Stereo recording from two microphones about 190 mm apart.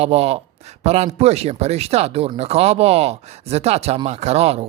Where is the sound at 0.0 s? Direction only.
35° right (ahead or behind).